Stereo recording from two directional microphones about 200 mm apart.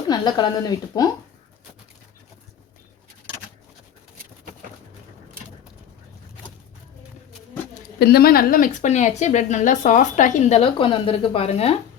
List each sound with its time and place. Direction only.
0.1 s speech: 20° left (ahead or behind)
7.9 s a woman's voice: 50° left (ahead or behind); by 11.7 s 30° left (ahead or behind)